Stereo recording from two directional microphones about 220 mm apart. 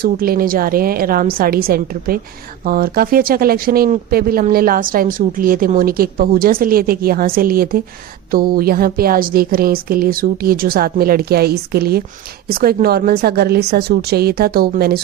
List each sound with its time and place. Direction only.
0.0 s a woman's voice: 40° right (ahead or behind)